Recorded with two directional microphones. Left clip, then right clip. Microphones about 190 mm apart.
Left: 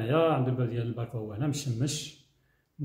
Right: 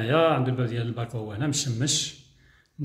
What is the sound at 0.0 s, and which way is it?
Speech, centre (ahead or behind).